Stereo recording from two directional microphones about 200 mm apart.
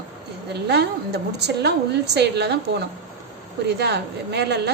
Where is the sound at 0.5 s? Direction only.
55° right (ahead or behind).